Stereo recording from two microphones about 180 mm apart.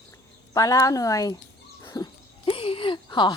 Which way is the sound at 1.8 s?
25° left (ahead or behind).